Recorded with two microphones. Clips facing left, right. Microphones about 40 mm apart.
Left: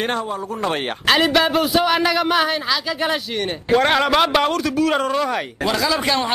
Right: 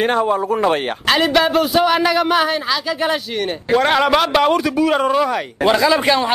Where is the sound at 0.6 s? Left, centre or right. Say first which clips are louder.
Right 5 dB; centre.